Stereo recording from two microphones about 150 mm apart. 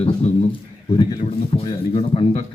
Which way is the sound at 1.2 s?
40° left (ahead or behind).